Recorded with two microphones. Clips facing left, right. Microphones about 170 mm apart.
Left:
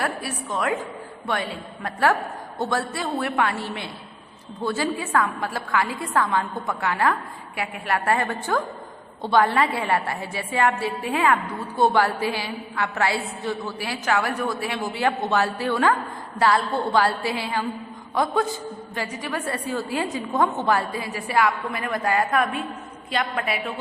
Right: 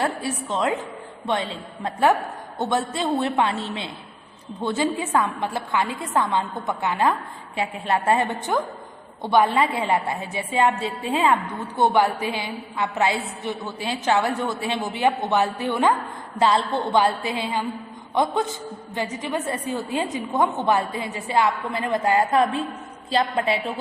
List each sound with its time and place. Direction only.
0.0 s a woman's voice: 25° right (ahead or behind)